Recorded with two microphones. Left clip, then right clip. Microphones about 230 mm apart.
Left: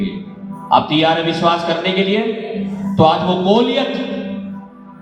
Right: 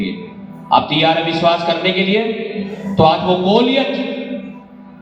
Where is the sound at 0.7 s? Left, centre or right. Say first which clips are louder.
Even; left.